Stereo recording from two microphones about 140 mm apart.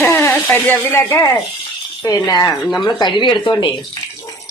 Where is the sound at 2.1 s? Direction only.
30° left (ahead or behind).